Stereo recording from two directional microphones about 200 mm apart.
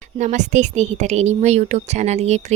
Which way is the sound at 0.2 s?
35° right (ahead or behind).